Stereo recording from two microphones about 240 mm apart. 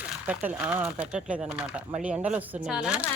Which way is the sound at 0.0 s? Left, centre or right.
Centre.